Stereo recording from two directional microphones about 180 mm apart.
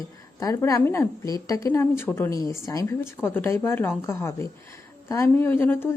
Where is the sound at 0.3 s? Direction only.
20° left (ahead or behind).